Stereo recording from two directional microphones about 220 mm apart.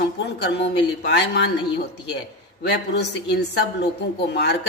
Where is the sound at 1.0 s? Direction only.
50° left (ahead or behind).